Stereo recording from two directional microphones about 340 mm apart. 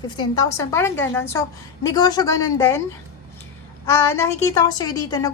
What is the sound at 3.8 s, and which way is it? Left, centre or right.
Speech, centre.